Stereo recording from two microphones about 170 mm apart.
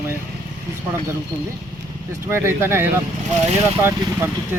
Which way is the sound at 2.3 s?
15° right (ahead or behind).